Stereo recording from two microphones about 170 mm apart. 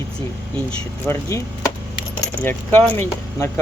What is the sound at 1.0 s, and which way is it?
Speech, 15° left (ahead or behind).